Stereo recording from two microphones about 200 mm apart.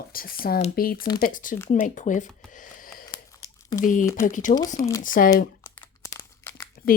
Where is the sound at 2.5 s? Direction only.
40° left (ahead or behind).